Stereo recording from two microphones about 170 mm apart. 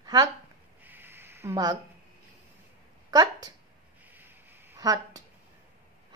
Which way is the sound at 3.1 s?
20° right (ahead or behind).